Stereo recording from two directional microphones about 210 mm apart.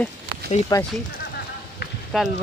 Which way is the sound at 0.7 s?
20° left (ahead or behind).